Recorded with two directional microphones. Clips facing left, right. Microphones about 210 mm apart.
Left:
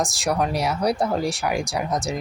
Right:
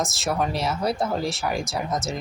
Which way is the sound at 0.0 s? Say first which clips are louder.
Left 2 dB; centre (ahead or behind).